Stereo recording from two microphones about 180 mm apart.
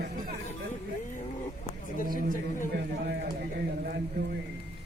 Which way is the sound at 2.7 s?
65° right (ahead or behind).